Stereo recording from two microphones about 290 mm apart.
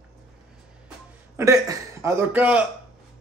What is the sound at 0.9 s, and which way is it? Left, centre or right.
A man's voice, centre.